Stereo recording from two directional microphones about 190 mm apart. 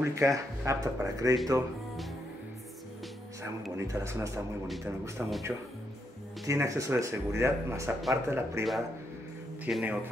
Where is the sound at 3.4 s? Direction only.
15° right (ahead or behind).